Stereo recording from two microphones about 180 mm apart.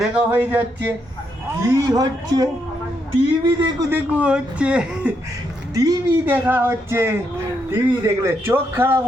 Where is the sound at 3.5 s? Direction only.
15° right (ahead or behind).